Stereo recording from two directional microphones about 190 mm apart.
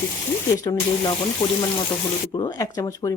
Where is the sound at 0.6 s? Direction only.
20° left (ahead or behind).